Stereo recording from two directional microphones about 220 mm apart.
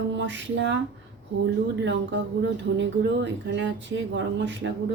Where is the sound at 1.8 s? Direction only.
55° right (ahead or behind).